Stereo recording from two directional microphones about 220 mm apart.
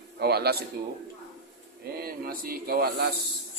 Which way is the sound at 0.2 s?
45° right (ahead or behind).